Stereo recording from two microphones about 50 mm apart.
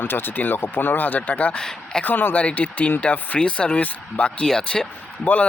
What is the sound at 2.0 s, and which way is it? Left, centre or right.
Speech, left.